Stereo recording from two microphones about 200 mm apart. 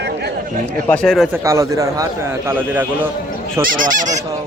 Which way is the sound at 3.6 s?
40° right (ahead or behind).